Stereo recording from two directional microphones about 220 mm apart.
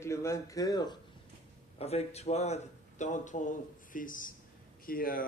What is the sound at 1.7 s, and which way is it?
A man's voice, 30° left (ahead or behind).